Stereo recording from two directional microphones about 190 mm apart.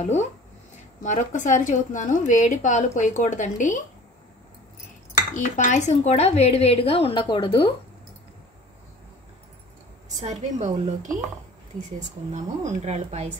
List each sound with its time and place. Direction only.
0.0 s a woman's voice: 35° left (ahead or behind)
5.1 s a woman's voice: 45° left (ahead or behind); by 7.7 s 25° left (ahead or behind)
10.0 s a woman's voice: 35° right (ahead or behind)
12.3 s a woman's voice: 35° right (ahead or behind)